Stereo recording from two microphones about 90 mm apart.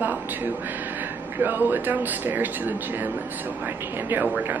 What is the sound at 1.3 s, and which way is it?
Speech, 25° right (ahead or behind).